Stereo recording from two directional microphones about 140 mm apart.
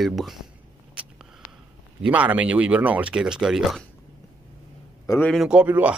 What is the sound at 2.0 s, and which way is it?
Speech, 10° right (ahead or behind).